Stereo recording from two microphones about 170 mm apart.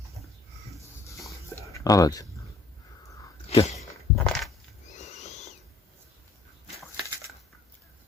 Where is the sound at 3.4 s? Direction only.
35° left (ahead or behind).